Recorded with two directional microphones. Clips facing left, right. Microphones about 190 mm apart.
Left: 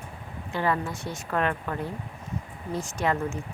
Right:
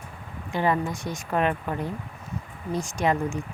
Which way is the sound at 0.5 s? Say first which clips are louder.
Right 3 dB; 15° right (ahead or behind).